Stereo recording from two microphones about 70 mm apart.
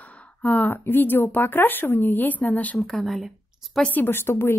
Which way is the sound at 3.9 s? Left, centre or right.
Left.